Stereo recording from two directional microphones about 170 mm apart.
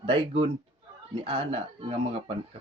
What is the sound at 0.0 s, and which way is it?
Speech, 35° right (ahead or behind).